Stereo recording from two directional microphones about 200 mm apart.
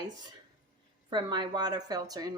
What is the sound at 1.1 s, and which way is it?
Speech, 25° right (ahead or behind).